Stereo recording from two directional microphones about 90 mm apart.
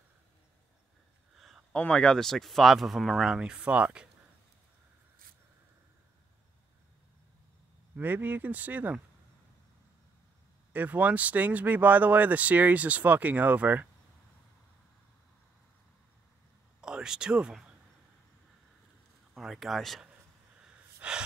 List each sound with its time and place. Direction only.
1.3 s a sound: 5° right (ahead or behind)
1.7 s speech: 10° left (ahead or behind); by 4.1 s 15° right (ahead or behind)
7.9 s speech: 20° right (ahead or behind)
10.7 s speech: 20° right (ahead or behind)
16.8 s speech: 10° right (ahead or behind)
19.3 s speech: 5° right (ahead or behind)
20.6 s gasp: 10° right (ahead or behind)